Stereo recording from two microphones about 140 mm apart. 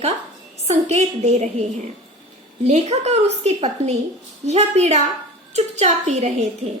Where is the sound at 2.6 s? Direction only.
50° right (ahead or behind).